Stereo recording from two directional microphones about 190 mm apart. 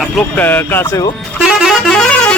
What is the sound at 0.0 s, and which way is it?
Speech, 5° left (ahead or behind).